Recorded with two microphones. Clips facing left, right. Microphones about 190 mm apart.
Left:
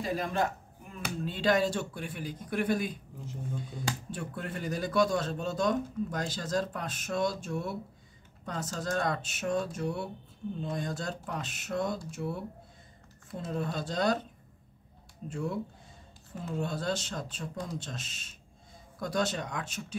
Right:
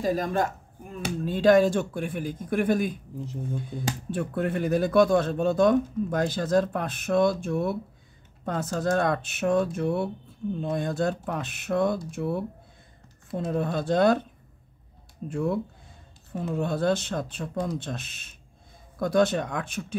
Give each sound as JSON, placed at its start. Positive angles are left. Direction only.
{"t": 0.0, "sound": "a man's voice", "side_deg": -40}
{"t": 4.1, "sound": "speech", "side_deg": -60}
{"t": 15.2, "sound": "speech", "side_deg": -60}